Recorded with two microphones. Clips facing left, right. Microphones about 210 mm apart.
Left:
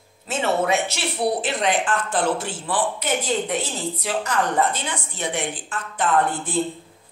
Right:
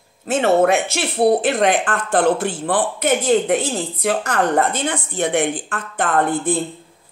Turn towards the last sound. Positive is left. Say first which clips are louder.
# right 4 dB
turn(degrees=-55)  # may be behind; listen again after turning